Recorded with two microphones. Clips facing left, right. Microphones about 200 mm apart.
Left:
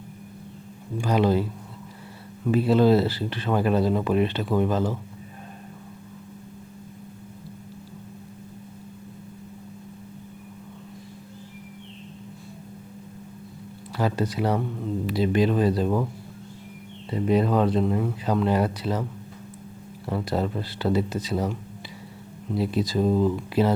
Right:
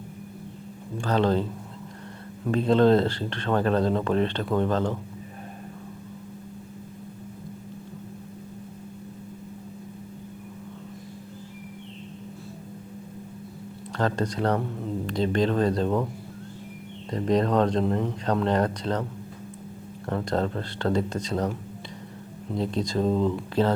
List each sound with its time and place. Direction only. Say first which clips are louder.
0.9 s speech: left 1 dB; 10° left (ahead or behind)
13.9 s speech: left 1 dB; 5° left (ahead or behind)
17.1 s speech: left 1 dB; 5° left (ahead or behind)
20.1 s speech: even; 10° left (ahead or behind)
22.5 s speech: left 2 dB; 10° left (ahead or behind)